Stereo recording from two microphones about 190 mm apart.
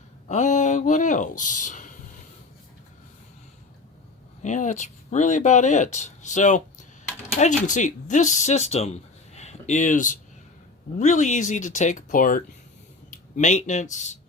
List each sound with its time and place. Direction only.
0.3 s speech: 40° left (ahead or behind)
4.4 s speech: 40° left (ahead or behind)